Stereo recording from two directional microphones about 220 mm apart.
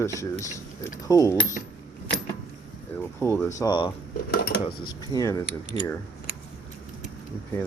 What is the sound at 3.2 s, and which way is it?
Speech, 10° left (ahead or behind).